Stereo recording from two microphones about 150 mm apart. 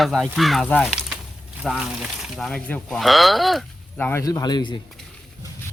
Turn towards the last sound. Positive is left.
turn(degrees=30)  # may be behind; listen again after turning